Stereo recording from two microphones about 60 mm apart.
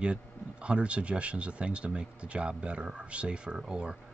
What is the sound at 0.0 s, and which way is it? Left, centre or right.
Speech, centre.